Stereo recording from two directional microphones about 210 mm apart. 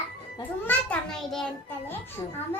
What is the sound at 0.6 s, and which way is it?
A child's voice, 5° left (ahead or behind).